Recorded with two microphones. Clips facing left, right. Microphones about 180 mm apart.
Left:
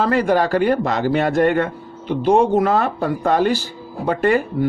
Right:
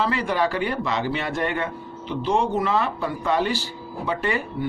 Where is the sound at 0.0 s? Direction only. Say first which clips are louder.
Left 6 dB; 45° left (ahead or behind).